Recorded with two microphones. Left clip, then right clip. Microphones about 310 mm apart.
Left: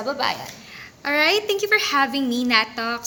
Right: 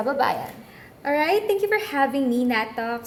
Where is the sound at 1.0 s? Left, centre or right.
Centre.